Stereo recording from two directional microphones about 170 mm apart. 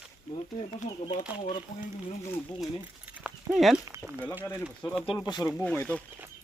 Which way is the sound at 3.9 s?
15° right (ahead or behind).